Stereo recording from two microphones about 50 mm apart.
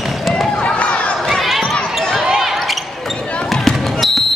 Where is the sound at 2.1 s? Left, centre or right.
Centre.